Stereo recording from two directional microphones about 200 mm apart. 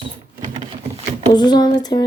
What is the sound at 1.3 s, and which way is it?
Speech, 20° left (ahead or behind).